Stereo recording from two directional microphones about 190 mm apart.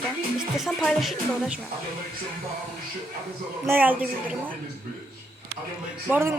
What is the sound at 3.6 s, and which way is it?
Speech, 10° right (ahead or behind).